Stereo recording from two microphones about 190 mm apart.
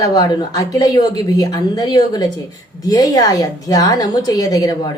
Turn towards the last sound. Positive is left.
turn(degrees=20)  # may be behind; listen again after turning